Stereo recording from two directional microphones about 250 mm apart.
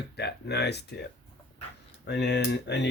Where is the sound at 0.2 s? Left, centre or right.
Left.